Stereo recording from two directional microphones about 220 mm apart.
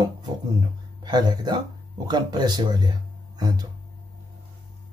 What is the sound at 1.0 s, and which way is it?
Speech, 20° right (ahead or behind).